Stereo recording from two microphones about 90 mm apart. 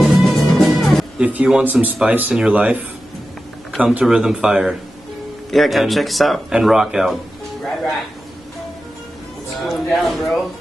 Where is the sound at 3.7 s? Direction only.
5° right (ahead or behind).